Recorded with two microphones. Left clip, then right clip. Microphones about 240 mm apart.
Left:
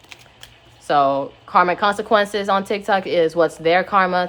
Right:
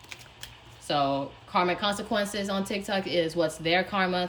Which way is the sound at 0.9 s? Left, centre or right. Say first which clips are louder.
Left 10 dB; centre.